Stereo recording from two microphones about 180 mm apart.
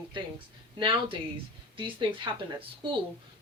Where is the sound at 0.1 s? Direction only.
25° right (ahead or behind).